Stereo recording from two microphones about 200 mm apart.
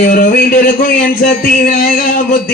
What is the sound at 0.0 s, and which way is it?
Speech, 45° left (ahead or behind).